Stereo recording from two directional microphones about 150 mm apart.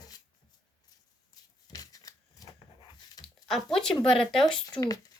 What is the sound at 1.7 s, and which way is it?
Shuffling cards, 25° left (ahead or behind).